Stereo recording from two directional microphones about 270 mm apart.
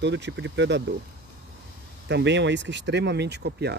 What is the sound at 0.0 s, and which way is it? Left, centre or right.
Speech, right.